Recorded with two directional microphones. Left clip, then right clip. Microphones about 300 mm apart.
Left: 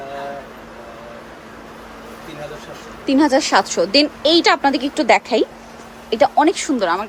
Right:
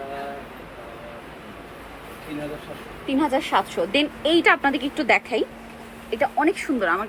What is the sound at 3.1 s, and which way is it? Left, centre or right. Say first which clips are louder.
Speech: left 7 dB; left.